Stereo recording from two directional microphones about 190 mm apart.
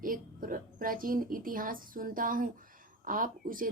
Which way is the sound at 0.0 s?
45° right (ahead or behind).